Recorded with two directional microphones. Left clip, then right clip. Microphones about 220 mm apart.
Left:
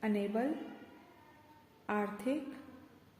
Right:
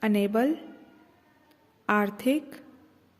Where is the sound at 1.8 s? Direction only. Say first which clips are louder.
Right 11 dB; 40° right (ahead or behind).